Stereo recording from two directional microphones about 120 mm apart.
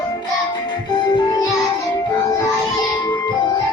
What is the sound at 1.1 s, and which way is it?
Music, 35° left (ahead or behind).